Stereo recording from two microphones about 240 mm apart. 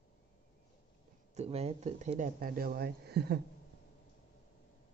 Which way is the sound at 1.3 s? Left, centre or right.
Right.